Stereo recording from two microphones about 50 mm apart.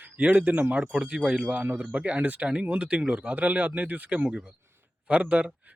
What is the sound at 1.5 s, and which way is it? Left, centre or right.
Speech, right.